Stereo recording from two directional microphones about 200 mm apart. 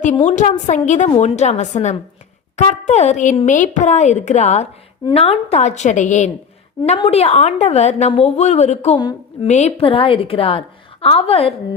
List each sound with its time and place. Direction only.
0.3 s speech: 35° left (ahead or behind)
9.0 s a woman's voice: 20° left (ahead or behind)
9.5 s a woman's voice: 35° left (ahead or behind)